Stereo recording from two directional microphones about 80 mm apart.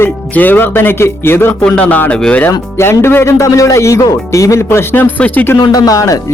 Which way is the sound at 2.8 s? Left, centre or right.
Left.